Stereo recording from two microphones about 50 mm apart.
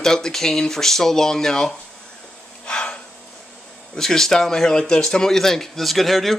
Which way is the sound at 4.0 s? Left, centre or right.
Centre.